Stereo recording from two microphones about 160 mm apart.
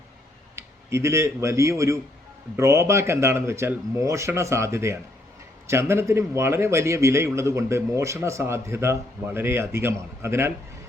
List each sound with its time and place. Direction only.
0.5 s a man's voice: 15° right (ahead or behind)